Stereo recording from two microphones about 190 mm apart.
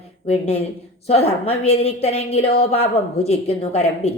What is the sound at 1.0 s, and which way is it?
A woman's voice, 35° left (ahead or behind).